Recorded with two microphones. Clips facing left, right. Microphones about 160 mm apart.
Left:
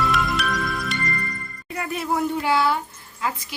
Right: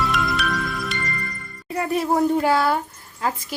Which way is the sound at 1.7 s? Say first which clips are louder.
Right 4 dB; 35° right (ahead or behind).